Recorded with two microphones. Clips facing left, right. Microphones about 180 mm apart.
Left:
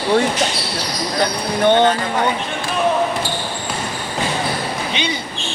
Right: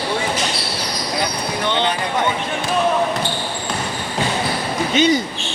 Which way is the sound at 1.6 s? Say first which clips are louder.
Left 8 dB; 50° left (ahead or behind).